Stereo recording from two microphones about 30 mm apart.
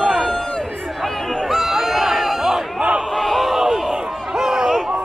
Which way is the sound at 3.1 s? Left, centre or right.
Centre.